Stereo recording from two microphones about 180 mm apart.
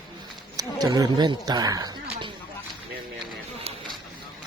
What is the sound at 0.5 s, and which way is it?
Wild animals, 20° right (ahead or behind).